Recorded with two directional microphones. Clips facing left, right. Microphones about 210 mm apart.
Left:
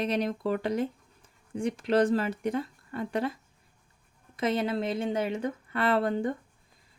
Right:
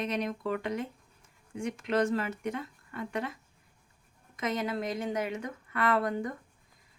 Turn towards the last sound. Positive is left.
turn(degrees=30)  # may be behind; listen again after turning